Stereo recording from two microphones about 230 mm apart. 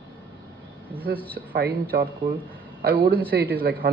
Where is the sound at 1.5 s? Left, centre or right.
Right.